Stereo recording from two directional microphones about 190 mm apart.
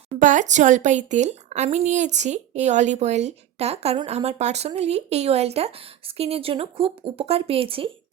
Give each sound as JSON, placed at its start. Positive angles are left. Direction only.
{"t": 0.2, "sound": "speech", "side_deg": -40}